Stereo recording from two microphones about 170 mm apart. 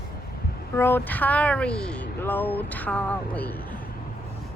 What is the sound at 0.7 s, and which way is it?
Speech, 15° left (ahead or behind).